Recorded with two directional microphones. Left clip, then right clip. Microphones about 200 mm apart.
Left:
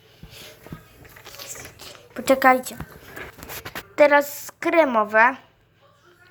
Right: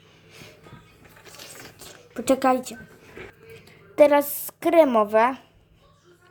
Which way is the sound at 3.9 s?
25° right (ahead or behind).